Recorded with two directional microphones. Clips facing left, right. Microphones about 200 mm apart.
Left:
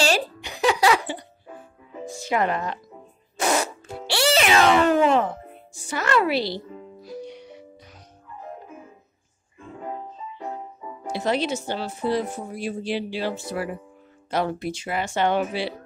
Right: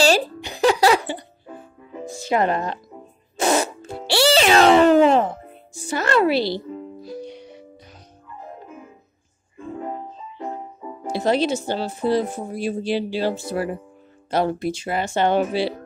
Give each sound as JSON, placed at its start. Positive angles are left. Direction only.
{"t": 0.0, "sound": "music", "side_deg": -30}
{"t": 2.1, "sound": "speech", "side_deg": -30}
{"t": 3.3, "sound": "music", "side_deg": -25}
{"t": 5.9, "sound": "speech", "side_deg": -30}
{"t": 7.0, "sound": "music", "side_deg": -30}
{"t": 11.1, "sound": "speech", "side_deg": -35}